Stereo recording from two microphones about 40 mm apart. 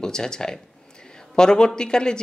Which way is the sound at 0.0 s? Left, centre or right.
Centre.